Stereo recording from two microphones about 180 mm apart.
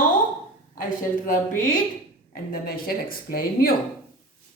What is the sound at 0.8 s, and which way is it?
A woman's voice, 50° left (ahead or behind).